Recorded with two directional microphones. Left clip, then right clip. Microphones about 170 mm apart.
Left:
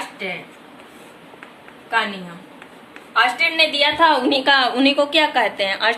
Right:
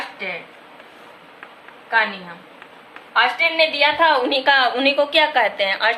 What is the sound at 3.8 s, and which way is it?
A woman's voice, 20° left (ahead or behind).